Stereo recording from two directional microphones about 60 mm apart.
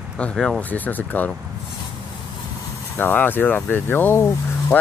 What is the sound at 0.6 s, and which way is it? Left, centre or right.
Speech, left.